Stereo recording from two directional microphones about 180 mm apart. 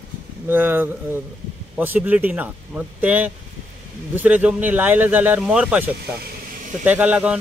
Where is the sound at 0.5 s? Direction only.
10° right (ahead or behind).